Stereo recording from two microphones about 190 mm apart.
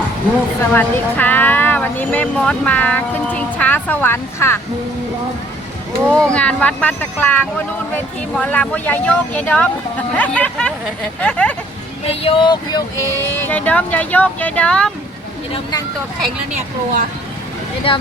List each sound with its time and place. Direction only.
0.7 s speech: 10° left (ahead or behind)
6.1 s speech: 5° left (ahead or behind)
12.0 s speech: 30° left (ahead or behind)
13.4 s speech: 10° left (ahead or behind)
16.5 s a woman's voice: 45° right (ahead or behind)
17.9 s speech: 25° left (ahead or behind)